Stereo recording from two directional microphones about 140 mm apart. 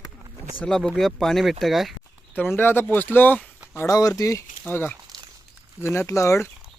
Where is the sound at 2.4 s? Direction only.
15° left (ahead or behind).